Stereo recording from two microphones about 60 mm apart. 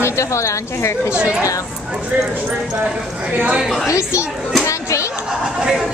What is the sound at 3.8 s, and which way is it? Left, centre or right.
Speech, left.